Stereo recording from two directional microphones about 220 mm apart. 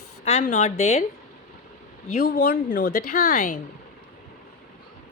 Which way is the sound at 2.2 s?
50° left (ahead or behind).